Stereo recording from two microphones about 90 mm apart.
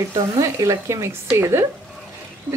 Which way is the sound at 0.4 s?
35° right (ahead or behind).